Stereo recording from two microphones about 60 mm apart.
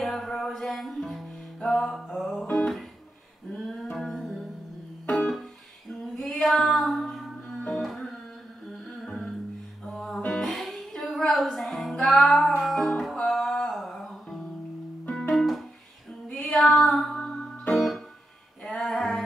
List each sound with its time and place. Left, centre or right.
0.0 s a sound: centre
0.4 s music: centre
3.5 s music: centre
15.0 s music: centre
15.3 s music: centre
16.3 s female singing: centre
17.1 s music: centre